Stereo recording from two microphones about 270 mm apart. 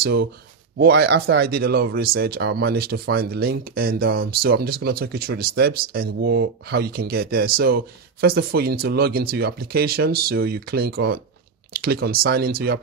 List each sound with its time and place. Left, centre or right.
0.0 s speech: right